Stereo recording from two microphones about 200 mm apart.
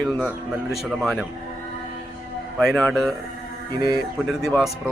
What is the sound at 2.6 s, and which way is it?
Speech, centre (ahead or behind).